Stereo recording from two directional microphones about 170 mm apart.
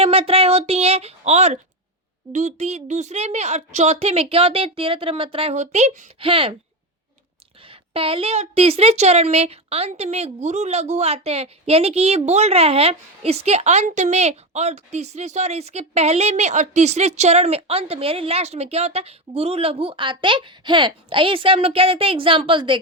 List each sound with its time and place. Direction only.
0.0 s speech: 35° right (ahead or behind)
7.7 s speech: 35° right (ahead or behind)